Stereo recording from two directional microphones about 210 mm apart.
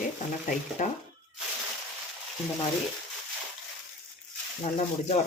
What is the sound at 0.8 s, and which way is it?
Speech, 35° left (ahead or behind).